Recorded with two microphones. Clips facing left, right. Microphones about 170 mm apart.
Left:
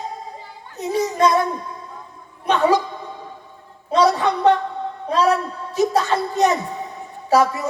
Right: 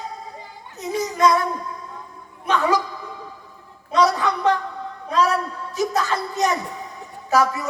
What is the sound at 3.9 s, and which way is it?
A woman's voice, 30° left (ahead or behind).